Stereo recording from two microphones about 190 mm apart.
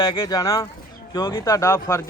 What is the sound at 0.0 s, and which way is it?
Speech, 20° left (ahead or behind).